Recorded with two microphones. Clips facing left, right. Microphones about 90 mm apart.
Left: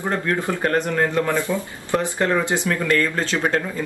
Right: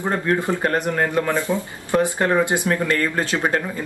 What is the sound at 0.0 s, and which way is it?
Speech, 20° right (ahead or behind).